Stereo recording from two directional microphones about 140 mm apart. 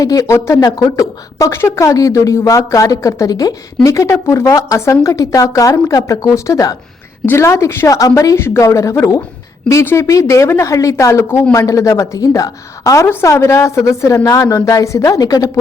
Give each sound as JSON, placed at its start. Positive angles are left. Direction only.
{"t": 0.0, "sound": "a woman's voice", "side_deg": 25}